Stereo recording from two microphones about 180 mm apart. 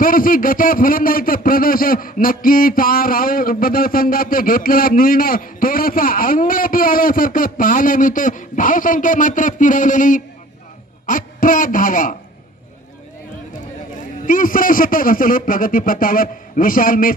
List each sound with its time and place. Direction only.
0.0 s speech: 50° left (ahead or behind)
14.2 s speech: 50° left (ahead or behind)